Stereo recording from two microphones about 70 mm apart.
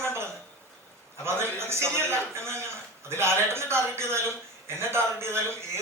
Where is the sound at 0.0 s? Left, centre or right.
Right.